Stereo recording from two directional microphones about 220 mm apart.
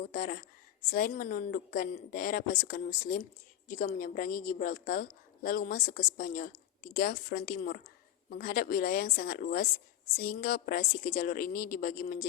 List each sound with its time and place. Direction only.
0.1 s a woman's voice: 40° left (ahead or behind)